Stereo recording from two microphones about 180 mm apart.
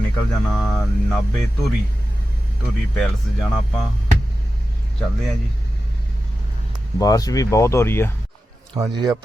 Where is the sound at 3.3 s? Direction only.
Centre (ahead or behind).